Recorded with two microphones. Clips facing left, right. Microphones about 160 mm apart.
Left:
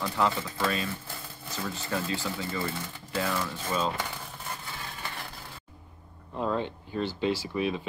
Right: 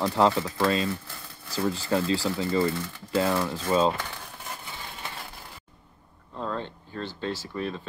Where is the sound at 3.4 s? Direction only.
45° right (ahead or behind).